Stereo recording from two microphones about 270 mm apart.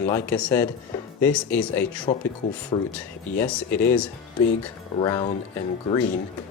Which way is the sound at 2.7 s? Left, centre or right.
Centre.